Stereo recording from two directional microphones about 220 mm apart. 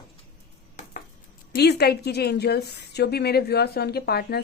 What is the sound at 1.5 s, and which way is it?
A woman's voice, 50° left (ahead or behind).